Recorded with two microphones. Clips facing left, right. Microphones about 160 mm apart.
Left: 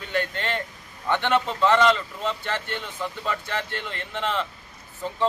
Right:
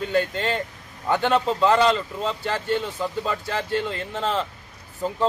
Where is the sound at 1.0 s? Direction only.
35° right (ahead or behind).